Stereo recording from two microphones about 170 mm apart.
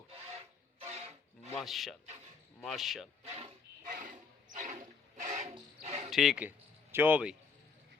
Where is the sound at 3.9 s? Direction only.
50° right (ahead or behind).